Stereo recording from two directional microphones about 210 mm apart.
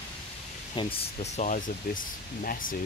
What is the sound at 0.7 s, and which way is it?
Speech, 25° left (ahead or behind).